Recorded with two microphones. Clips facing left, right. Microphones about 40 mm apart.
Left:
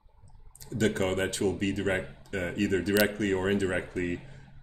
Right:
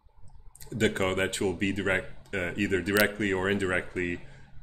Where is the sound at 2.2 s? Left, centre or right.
Right.